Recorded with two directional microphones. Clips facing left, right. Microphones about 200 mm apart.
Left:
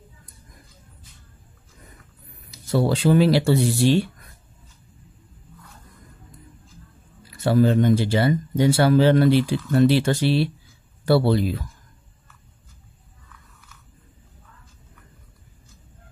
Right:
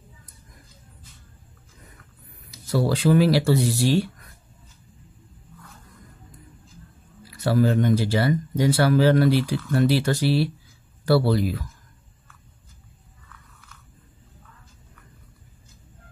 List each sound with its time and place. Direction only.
2.7 s speech: 25° left (ahead or behind)
7.4 s speech: 25° left (ahead or behind)